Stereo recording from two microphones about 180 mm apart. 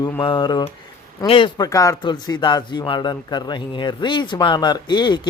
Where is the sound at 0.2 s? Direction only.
25° left (ahead or behind).